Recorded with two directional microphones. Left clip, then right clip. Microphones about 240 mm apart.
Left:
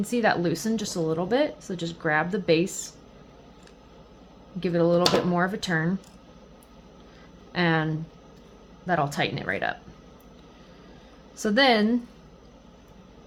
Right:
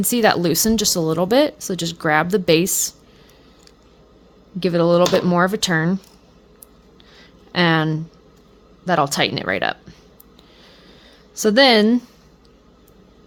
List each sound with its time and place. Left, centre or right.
0.0 s speech: right
4.6 s speech: right
7.5 s speech: right
11.3 s speech: right